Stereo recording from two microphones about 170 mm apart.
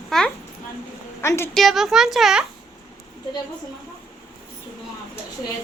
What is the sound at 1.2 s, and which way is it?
Speech, 15° left (ahead or behind).